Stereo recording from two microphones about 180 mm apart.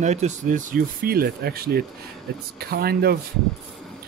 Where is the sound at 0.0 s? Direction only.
40° right (ahead or behind); by 3.2 s 60° right (ahead or behind).